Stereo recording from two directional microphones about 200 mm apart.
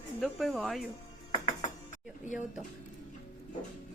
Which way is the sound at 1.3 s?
35° left (ahead or behind).